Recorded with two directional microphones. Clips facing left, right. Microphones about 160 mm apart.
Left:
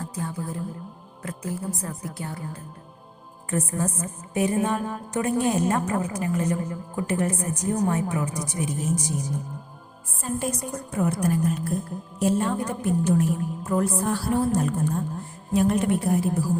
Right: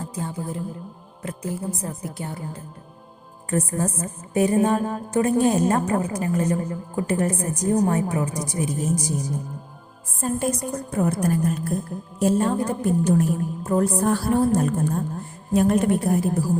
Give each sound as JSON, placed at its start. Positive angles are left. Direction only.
{"t": 0.0, "sound": "music", "side_deg": -25}
{"t": 1.2, "sound": "a woman's voice", "side_deg": -25}
{"t": 3.5, "sound": "a woman's voice", "side_deg": -40}
{"t": 10.2, "sound": "a woman's voice", "side_deg": -40}